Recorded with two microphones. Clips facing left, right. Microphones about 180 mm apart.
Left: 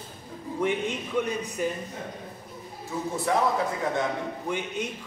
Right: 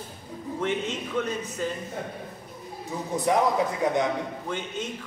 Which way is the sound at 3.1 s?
20° right (ahead or behind).